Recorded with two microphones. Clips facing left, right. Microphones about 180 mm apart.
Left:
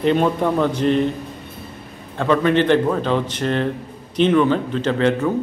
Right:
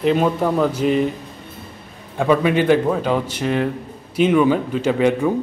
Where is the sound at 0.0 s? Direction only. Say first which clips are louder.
Even; 5° right (ahead or behind).